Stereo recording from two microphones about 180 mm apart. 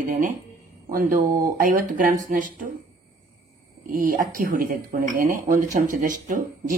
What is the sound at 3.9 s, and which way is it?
Speech, 50° right (ahead or behind).